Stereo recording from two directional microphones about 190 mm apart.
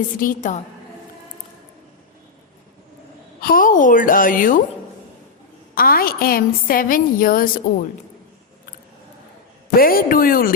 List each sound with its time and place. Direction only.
0.2 s a woman's voice: 45° left (ahead or behind)
3.4 s a woman's voice: 45° left (ahead or behind)
5.7 s a woman's voice: 50° left (ahead or behind)
9.7 s a woman's voice: 50° left (ahead or behind)